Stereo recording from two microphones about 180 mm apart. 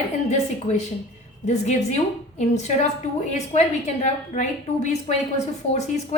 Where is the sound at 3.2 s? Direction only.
40° left (ahead or behind).